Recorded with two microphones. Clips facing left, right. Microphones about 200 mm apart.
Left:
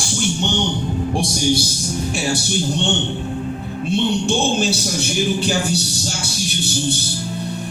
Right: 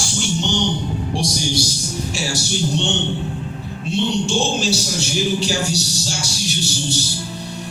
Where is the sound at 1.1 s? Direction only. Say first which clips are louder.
Left 4 dB; 55° left (ahead or behind).